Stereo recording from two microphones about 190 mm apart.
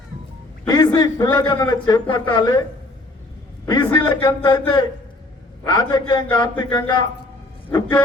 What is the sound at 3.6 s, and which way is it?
A man's voice, 20° left (ahead or behind).